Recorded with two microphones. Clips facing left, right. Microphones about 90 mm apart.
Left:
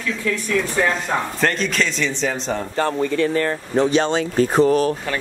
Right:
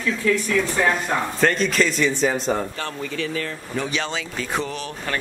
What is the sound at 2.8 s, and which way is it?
Speech, 30° left (ahead or behind).